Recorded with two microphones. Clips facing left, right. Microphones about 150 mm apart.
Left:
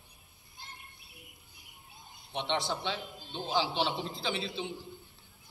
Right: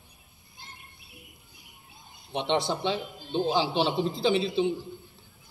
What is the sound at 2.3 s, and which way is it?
A man's voice, 20° right (ahead or behind).